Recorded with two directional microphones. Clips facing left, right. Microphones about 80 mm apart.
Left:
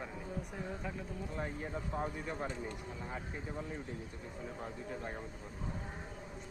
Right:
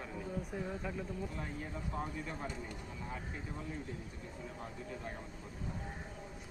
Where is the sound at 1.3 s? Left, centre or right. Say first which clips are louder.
Left 3 dB; left.